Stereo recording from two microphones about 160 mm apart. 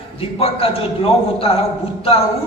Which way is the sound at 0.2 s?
35° left (ahead or behind).